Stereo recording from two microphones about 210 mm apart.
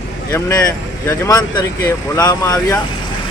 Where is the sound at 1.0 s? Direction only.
15° left (ahead or behind).